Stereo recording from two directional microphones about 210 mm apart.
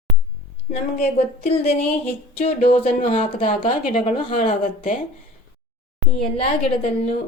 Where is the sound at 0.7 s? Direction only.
30° left (ahead or behind).